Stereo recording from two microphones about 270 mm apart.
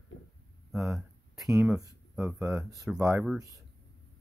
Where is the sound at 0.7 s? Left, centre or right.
Centre.